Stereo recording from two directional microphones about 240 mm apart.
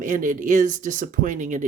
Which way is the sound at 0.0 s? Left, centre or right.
Right.